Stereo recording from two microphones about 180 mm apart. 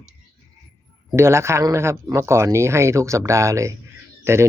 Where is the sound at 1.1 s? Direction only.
15° right (ahead or behind).